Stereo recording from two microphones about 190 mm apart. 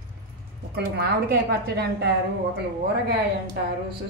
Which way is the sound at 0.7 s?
60° right (ahead or behind).